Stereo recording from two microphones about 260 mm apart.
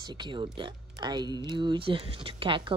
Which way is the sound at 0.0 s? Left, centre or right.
Centre.